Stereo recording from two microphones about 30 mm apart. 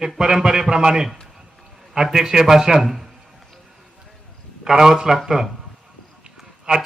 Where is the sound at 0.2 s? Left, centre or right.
Centre.